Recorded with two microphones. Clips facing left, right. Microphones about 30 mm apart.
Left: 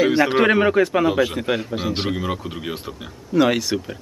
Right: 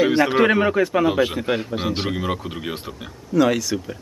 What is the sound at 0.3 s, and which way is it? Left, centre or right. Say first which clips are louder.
Speech: left 1 dB; centre.